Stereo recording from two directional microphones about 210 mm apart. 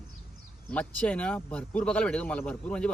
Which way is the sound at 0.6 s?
5° left (ahead or behind).